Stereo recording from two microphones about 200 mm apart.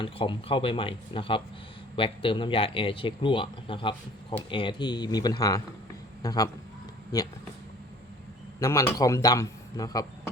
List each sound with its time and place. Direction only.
0.0 s a man's voice: 25° left (ahead or behind)
8.5 s speech: 15° left (ahead or behind)